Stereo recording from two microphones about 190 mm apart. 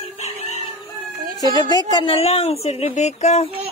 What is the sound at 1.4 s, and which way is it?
A woman's voice, 20° left (ahead or behind).